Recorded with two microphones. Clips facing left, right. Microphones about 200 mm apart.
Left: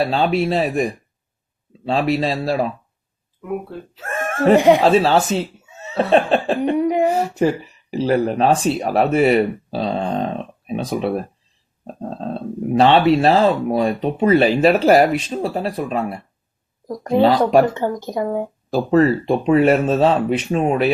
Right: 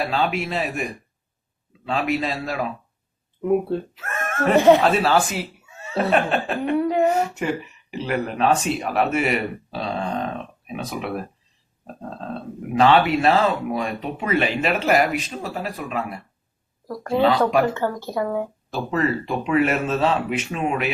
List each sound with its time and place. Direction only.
0.0 s speech: 30° left (ahead or behind)
3.9 s chuckle: 30° left (ahead or behind)
4.5 s speech: 15° left (ahead or behind)
4.8 s speech: 30° left (ahead or behind)
6.0 s chuckle: 30° left (ahead or behind)
6.7 s a sound: 15° left (ahead or behind)
7.1 s speech: 30° left (ahead or behind)
9.7 s a sound: 30° left (ahead or behind)
10.7 s speech: 30° left (ahead or behind)
16.8 s speech: 15° left (ahead or behind)
18.7 s speech: 35° left (ahead or behind)